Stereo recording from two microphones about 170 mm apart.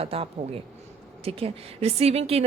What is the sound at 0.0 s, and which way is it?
A woman's voice, 35° right (ahead or behind).